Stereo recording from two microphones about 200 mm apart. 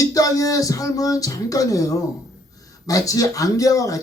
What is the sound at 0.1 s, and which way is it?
Speech, 15° left (ahead or behind).